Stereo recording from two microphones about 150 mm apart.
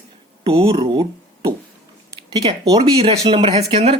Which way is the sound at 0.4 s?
40° right (ahead or behind).